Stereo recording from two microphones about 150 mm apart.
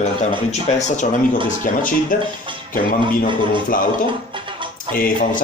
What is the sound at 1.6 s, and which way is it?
Speech, 60° left (ahead or behind).